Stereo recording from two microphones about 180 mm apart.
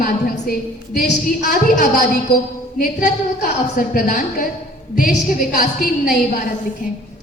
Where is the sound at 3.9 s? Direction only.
50° left (ahead or behind).